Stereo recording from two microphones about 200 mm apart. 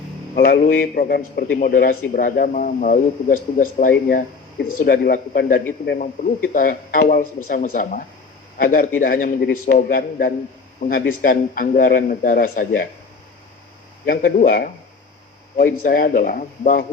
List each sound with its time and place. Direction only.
0.3 s a man's voice: 50° left (ahead or behind)
14.0 s a man's voice: 50° left (ahead or behind)